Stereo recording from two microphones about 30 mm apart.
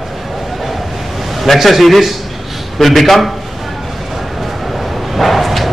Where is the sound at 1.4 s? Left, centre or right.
Centre.